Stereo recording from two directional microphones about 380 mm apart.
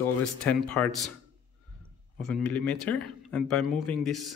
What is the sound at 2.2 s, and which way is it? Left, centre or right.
Speech, centre.